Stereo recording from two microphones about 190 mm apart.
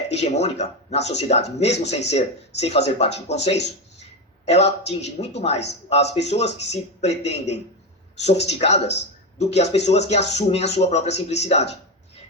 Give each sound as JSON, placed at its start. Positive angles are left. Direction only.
{"t": 0.1, "sound": "speech", "side_deg": 35}